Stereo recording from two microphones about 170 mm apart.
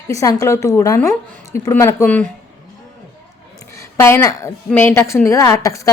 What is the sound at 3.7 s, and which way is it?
A woman's voice, 15° left (ahead or behind).